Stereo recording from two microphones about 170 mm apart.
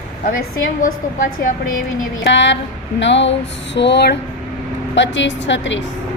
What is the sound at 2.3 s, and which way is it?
A woman's voice, 90° left.